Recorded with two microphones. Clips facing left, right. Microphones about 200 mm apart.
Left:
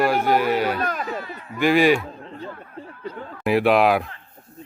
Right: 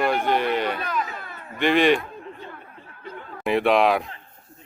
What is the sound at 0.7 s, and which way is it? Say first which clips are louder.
Speech: left 3 dB; 45° left (ahead or behind).